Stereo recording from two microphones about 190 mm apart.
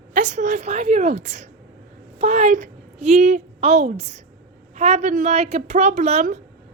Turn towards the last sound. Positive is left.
turn(degrees=-40)  # may be behind; listen again after turning